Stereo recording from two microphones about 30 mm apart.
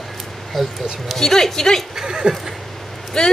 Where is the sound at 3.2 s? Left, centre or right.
Left.